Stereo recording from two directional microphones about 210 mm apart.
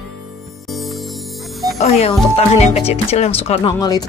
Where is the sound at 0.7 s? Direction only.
Centre (ahead or behind).